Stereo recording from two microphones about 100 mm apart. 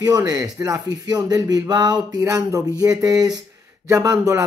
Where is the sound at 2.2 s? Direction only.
35° right (ahead or behind).